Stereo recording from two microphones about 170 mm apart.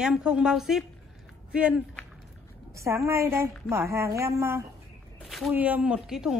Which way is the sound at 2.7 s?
15° right (ahead or behind).